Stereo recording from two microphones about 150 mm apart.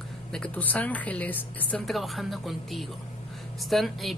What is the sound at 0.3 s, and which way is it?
A woman's voice, 10° left (ahead or behind).